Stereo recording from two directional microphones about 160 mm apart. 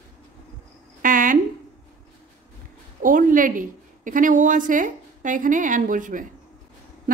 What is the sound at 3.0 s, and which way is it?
A woman's voice, 60° right (ahead or behind).